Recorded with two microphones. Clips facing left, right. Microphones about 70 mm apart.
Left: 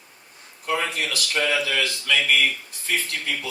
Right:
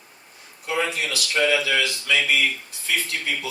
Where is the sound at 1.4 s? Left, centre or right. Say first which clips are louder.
Right 3 dB; left.